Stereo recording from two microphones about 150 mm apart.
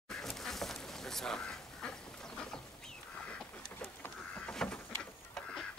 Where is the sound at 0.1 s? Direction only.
Centre (ahead or behind).